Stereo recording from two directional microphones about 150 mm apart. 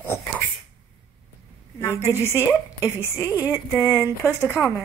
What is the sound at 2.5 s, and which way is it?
Speech, 15° right (ahead or behind).